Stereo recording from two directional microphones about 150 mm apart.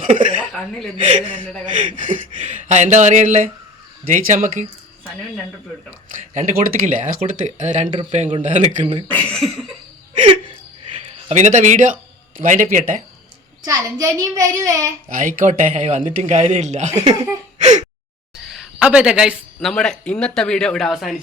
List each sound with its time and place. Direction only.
0.0 s a woman's voice: 60° right (ahead or behind)
1.0 s speech: 50° right (ahead or behind)
6.3 s speech: 60° right (ahead or behind)
7.2 s speech: 50° right (ahead or behind)
9.1 s speech: 5° left (ahead or behind)
11.3 s speech: 50° right (ahead or behind)
13.6 s a child's voice: 25° right (ahead or behind)
15.1 s speech: 60° right (ahead or behind)
17.6 s gasp: 50° right (ahead or behind)
18.4 s a sound: centre (ahead or behind)
19.5 s speech: 5° left (ahead or behind)